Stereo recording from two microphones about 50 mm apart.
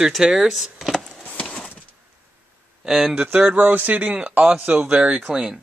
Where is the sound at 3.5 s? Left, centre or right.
Right; by 5.5 s centre.